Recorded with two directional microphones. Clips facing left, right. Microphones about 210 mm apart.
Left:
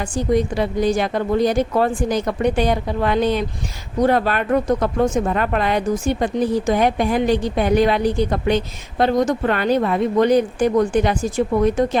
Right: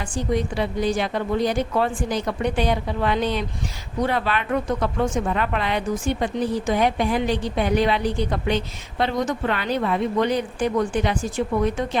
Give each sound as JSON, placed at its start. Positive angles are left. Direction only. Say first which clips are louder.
{"t": 0.0, "sound": "speech", "louder": "left 5 dB", "side_deg": 40}